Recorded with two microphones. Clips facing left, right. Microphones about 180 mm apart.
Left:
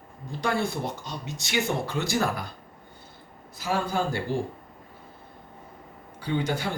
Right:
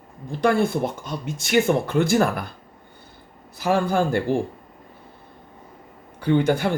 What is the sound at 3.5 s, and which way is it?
Speech, 60° right (ahead or behind).